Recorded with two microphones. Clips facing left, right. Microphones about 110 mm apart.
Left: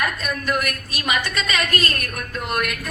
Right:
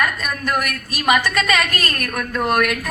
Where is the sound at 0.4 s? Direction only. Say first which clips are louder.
Right 3 dB; 45° right (ahead or behind).